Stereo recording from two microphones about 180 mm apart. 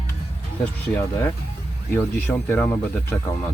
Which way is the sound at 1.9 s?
10° left (ahead or behind).